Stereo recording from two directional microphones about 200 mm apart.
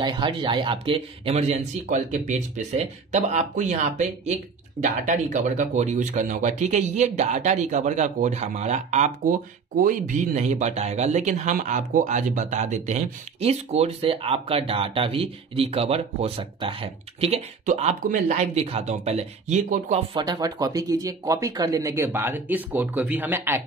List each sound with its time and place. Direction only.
0.0 s speech: 25° right (ahead or behind)